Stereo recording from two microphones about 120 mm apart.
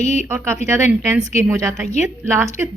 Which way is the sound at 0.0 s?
65° left (ahead or behind).